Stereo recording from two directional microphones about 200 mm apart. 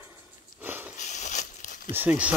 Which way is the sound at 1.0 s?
35° left (ahead or behind).